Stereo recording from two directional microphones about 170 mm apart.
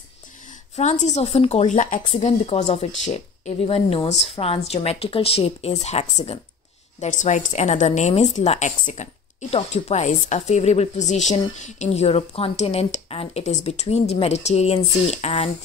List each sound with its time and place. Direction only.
0.7 s speech: 40° left (ahead or behind)